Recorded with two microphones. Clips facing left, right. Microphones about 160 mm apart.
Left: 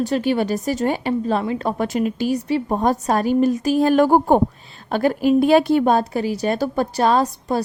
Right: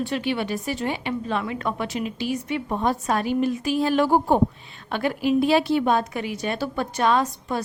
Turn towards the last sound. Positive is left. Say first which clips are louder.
# left 4 dB
turn(degrees=35)  # may be behind; listen again after turning